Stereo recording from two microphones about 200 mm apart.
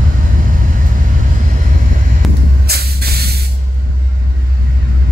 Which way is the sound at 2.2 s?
Centre (ahead or behind).